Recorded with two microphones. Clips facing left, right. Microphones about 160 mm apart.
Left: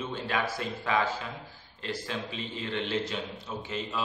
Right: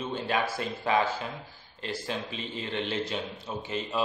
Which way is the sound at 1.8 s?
15° right (ahead or behind).